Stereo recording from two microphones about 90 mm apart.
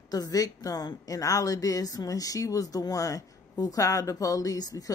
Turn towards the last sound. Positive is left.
turn(degrees=45)  # may be behind; listen again after turning